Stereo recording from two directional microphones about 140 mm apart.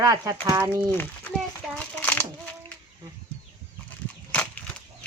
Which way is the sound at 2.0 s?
10° left (ahead or behind).